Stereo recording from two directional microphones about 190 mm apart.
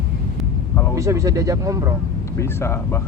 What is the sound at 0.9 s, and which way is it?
Speech, 15° right (ahead or behind).